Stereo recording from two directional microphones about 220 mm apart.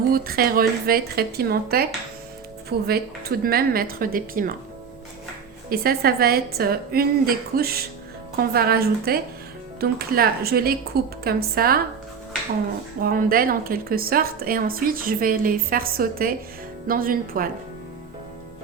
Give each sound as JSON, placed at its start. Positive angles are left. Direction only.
{"t": 0.1, "sound": "a woman's voice", "side_deg": -40}
{"t": 5.6, "sound": "a woman's voice", "side_deg": -45}
{"t": 13.0, "sound": "a woman's voice", "side_deg": -40}